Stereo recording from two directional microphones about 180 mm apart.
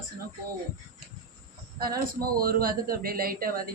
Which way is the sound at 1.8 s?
55° right (ahead or behind).